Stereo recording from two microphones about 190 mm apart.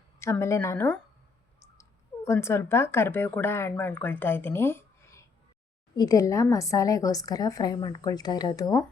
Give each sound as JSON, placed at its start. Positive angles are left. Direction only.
{"t": 0.2, "sound": "speech", "side_deg": 15}
{"t": 2.2, "sound": "a woman's voice", "side_deg": 15}